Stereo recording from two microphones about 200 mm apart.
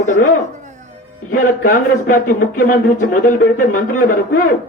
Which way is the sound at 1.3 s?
45° left (ahead or behind).